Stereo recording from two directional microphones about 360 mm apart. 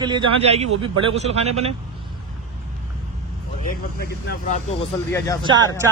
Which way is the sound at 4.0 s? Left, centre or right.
Left.